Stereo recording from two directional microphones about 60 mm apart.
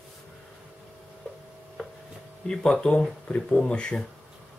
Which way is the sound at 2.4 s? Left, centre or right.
Centre.